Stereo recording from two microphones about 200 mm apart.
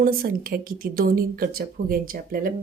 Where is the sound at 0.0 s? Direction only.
45° right (ahead or behind).